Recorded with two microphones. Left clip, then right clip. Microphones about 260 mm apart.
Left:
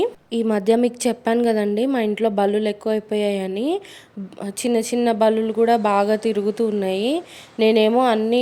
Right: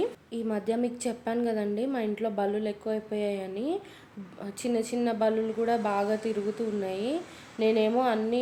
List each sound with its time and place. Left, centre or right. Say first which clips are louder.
0.0 s a woman's voice: left 10 dB; left